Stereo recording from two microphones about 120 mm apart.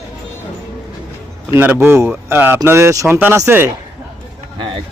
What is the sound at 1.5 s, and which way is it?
Speech, 15° right (ahead or behind).